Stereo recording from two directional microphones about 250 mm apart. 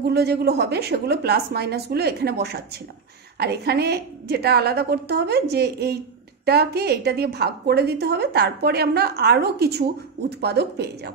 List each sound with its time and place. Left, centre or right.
0.0 s a woman's voice: right